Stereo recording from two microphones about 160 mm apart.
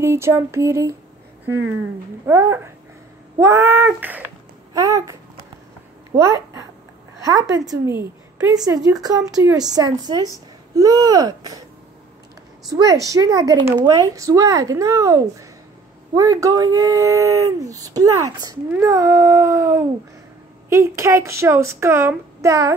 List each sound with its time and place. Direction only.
0.0 s a woman's voice: 15° right (ahead or behind)
2.2 s a woman's voice: 15° right (ahead or behind)
4.7 s speech: 20° right (ahead or behind)
6.1 s speech: 20° right (ahead or behind)
12.7 s a woman's voice: 20° right (ahead or behind)